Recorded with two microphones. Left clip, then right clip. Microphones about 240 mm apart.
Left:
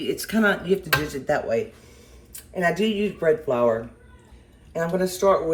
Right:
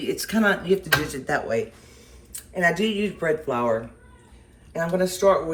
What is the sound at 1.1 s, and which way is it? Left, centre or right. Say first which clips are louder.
Speech: left 2 dB; right.